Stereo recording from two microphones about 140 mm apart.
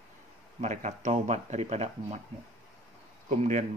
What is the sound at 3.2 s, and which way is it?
Speech, 55° right (ahead or behind).